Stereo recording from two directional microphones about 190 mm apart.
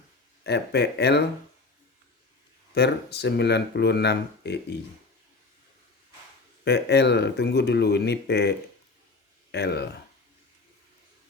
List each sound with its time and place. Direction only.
0.4 s speech: 60° left (ahead or behind)
2.7 s speech: 60° left (ahead or behind)
6.7 s speech: 60° left (ahead or behind)